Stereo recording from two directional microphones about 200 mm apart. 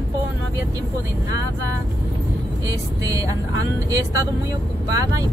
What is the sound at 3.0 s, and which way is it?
Speech, 15° right (ahead or behind).